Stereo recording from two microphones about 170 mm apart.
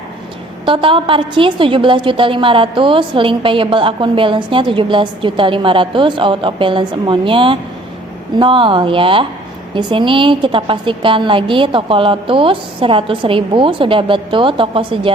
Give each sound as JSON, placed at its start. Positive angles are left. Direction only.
{"t": 0.6, "sound": "a woman's voice", "side_deg": -30}